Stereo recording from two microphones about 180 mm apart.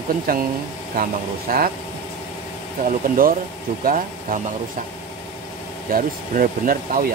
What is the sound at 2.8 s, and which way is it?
Speech, 50° right (ahead or behind).